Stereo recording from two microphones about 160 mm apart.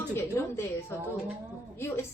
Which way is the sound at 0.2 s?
15° left (ahead or behind).